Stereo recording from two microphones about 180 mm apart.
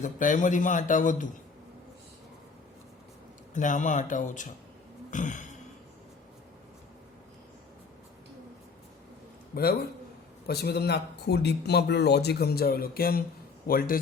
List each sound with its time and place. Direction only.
0.0 s a man's voice: 45° left (ahead or behind)
3.5 s a man's voice: 45° left (ahead or behind)
10.4 s a man's voice: 60° left (ahead or behind)